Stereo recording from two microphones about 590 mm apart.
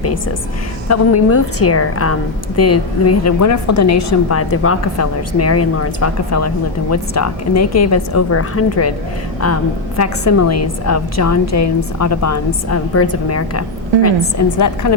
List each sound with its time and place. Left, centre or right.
0.9 s a woman's voice: left
10.0 s a woman's voice: left